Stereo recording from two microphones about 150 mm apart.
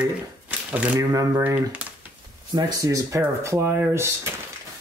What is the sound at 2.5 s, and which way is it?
Speech, 25° right (ahead or behind).